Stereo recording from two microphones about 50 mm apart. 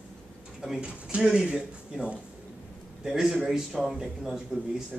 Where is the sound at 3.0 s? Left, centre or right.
Centre.